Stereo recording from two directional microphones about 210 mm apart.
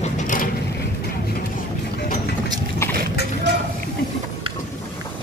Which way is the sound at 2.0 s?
50° left (ahead or behind).